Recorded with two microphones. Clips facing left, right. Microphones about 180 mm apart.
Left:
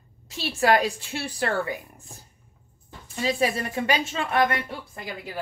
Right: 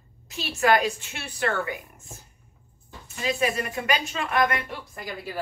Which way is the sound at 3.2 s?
30° left (ahead or behind).